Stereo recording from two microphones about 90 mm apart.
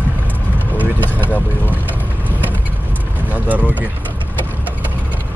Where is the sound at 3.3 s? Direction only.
15° right (ahead or behind).